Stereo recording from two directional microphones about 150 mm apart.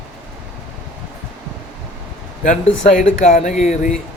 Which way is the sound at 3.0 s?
55° left (ahead or behind).